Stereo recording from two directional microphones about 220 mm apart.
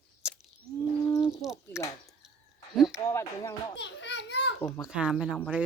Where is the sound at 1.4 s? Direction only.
Centre (ahead or behind).